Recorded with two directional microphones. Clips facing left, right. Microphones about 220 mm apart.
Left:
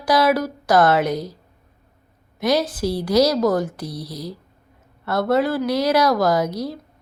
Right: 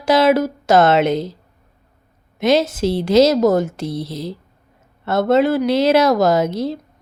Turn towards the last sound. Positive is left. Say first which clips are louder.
# right 4 dB
turn(degrees=-25)  # may be behind; listen again after turning